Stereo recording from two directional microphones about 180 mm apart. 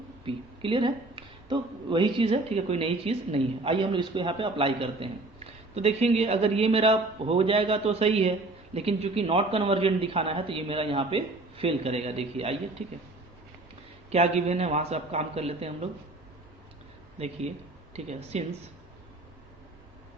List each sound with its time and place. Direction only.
0.3 s speech: 30° right (ahead or behind)
14.1 s speech: 35° right (ahead or behind)
17.2 s speech: 35° right (ahead or behind)